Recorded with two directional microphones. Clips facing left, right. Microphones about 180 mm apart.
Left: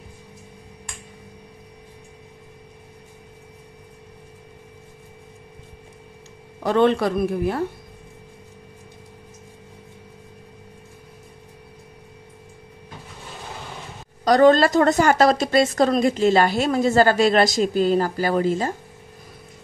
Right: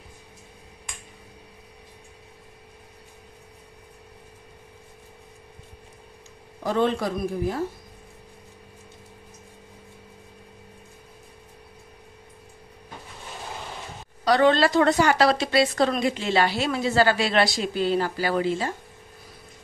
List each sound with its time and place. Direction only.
6.6 s speech: 70° left (ahead or behind)
14.2 s a woman's voice: 45° left (ahead or behind)